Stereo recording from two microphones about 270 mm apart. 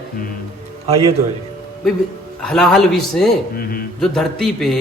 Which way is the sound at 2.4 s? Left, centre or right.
Centre.